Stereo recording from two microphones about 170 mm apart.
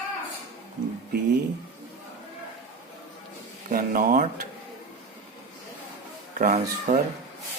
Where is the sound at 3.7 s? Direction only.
55° right (ahead or behind).